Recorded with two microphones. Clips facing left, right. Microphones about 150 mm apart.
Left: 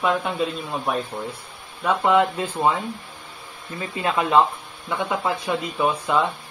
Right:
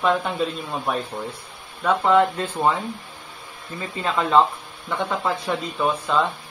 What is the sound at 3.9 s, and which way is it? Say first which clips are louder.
A man's voice: even; 10° left (ahead or behind).